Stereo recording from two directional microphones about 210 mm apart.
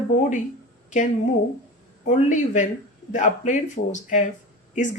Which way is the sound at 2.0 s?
35° left (ahead or behind).